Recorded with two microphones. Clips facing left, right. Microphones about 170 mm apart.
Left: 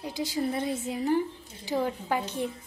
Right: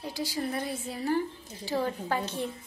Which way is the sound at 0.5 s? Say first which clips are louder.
Left 4 dB; 20° left (ahead or behind).